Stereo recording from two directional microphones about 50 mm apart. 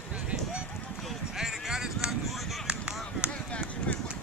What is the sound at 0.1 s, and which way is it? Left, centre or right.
Run, right.